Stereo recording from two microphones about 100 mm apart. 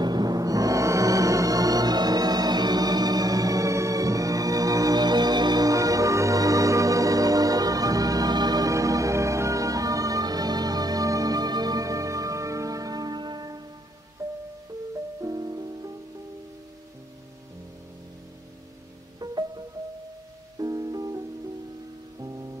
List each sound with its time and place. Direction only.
0.0 s music: 40° right (ahead or behind)
14.2 s music: 30° right (ahead or behind)
15.2 s music: 40° right (ahead or behind)
19.2 s music: 40° right (ahead or behind)
20.5 s music: 35° right (ahead or behind)